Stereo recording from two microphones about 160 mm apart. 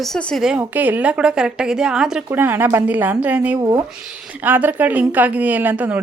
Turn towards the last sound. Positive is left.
turn(degrees=-10)  # may be behind; listen again after turning